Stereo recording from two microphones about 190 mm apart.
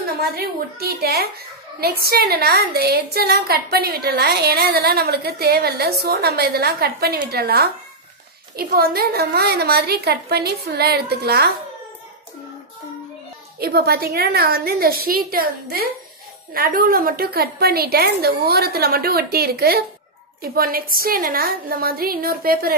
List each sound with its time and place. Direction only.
0.2 s a woman's voice: 55° right (ahead or behind)
13.6 s a woman's voice: 55° right (ahead or behind)